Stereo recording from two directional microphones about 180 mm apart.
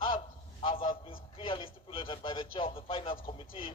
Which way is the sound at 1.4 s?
30° left (ahead or behind).